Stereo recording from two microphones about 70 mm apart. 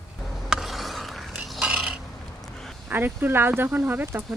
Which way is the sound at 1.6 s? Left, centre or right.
Centre.